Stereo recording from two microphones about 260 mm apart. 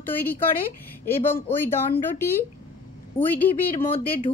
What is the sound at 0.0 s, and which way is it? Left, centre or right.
A woman's voice, centre.